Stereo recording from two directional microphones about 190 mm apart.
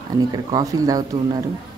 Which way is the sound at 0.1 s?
20° right (ahead or behind).